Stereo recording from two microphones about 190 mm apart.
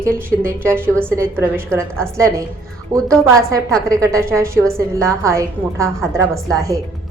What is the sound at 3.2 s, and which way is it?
A woman's voice, 15° right (ahead or behind).